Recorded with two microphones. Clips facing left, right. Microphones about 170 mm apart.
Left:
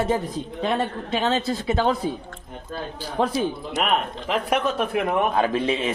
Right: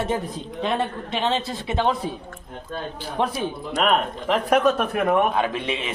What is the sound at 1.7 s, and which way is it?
Speech, 40° left (ahead or behind).